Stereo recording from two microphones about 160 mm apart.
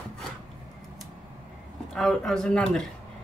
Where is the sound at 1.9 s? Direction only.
5° left (ahead or behind).